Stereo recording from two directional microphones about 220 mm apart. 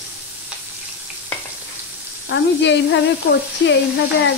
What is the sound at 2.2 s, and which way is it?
Speech, 50° left (ahead or behind).